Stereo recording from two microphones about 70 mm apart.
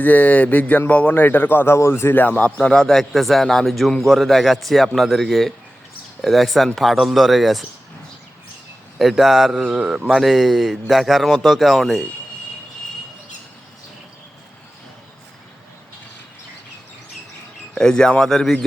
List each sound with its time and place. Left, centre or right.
0.0 s speech: left
1.7 s speech: left; by 2.7 s centre
2.7 s a man's voice: centre
9.0 s a man's voice: centre
17.7 s a man's voice: centre